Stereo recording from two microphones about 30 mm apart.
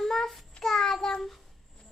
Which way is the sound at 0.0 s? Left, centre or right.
Centre.